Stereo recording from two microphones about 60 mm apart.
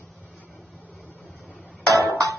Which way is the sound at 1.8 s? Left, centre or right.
Right.